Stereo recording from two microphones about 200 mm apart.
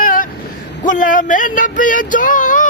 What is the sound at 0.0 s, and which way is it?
Vehicle, 45° left (ahead or behind).